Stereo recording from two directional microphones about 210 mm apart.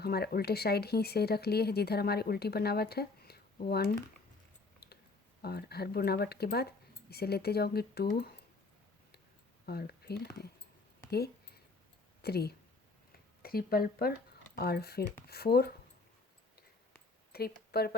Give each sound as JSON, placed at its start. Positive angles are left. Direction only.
{"t": 0.0, "sound": "speech", "side_deg": 50}
{"t": 5.4, "sound": "speech", "side_deg": 50}
{"t": 9.6, "sound": "speech", "side_deg": 45}
{"t": 11.1, "sound": "a sound", "side_deg": 50}
{"t": 12.2, "sound": "speech", "side_deg": 50}
{"t": 17.3, "sound": "speech", "side_deg": 45}